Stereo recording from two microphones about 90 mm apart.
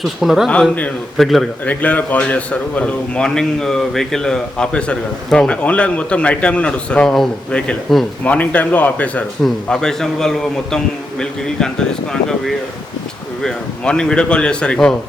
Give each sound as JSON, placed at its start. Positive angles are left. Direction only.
{"t": 0.0, "sound": "speech", "side_deg": 0}
{"t": 1.6, "sound": "speech", "side_deg": 15}